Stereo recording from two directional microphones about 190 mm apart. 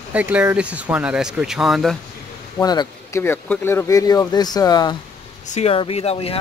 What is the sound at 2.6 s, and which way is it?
Speech, 20° left (ahead or behind).